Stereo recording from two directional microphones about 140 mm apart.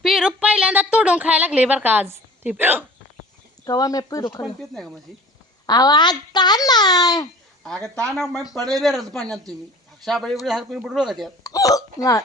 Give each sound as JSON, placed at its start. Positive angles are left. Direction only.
{"t": 0.0, "sound": "a sound", "side_deg": 0}
{"t": 3.6, "sound": "a child's voice", "side_deg": 25}
{"t": 4.4, "sound": "speech", "side_deg": 0}
{"t": 5.6, "sound": "a child's voice", "side_deg": 30}
{"t": 7.6, "sound": "speech", "side_deg": 5}
{"t": 11.4, "sound": "a child's voice", "side_deg": 25}